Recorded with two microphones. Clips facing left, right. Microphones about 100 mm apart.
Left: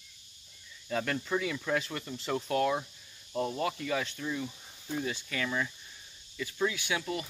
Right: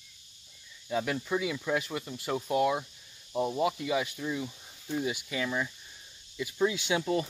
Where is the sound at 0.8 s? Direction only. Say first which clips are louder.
Right 2 dB; 10° right (ahead or behind); by 7.2 s 25° right (ahead or behind).